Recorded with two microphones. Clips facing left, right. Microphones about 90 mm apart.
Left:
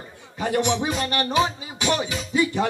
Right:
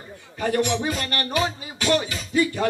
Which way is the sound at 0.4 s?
15° left (ahead or behind).